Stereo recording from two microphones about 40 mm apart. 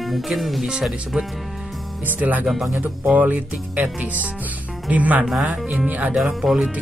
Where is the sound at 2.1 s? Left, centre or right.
Right.